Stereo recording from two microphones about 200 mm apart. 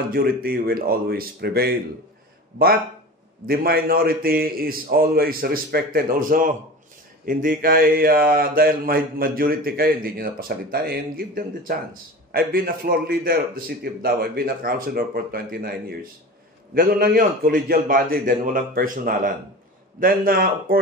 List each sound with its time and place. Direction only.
0.1 s speech: 45° right (ahead or behind)
3.4 s speech: 50° right (ahead or behind)